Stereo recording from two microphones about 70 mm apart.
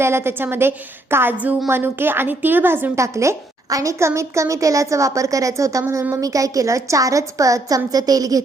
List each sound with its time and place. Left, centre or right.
0.0 s a woman's voice: right
2.9 s a woman's voice: right
7.9 s a woman's voice: right